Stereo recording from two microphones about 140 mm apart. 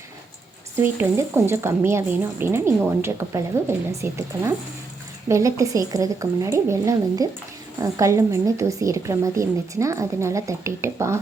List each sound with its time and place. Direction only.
0.8 s a woman's voice: 15° right (ahead or behind)